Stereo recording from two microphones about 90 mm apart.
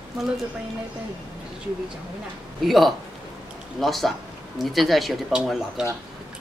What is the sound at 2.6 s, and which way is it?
Speech, centre (ahead or behind).